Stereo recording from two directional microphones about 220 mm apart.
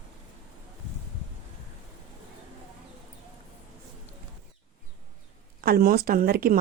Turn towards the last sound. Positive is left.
turn(degrees=-40)  # may be behind; listen again after turning